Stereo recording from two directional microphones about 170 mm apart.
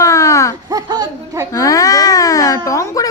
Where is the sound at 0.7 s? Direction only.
25° right (ahead or behind).